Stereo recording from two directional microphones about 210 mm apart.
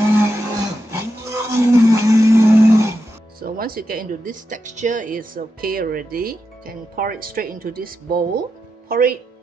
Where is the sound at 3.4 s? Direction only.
45° right (ahead or behind).